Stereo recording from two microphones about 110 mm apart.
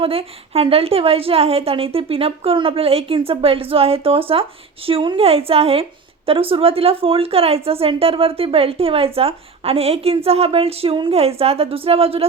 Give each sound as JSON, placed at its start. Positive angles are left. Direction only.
{"t": 0.0, "sound": "a woman's voice", "side_deg": -60}